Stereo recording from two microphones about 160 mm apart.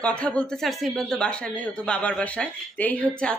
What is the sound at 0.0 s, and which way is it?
Speech, 5° left (ahead or behind).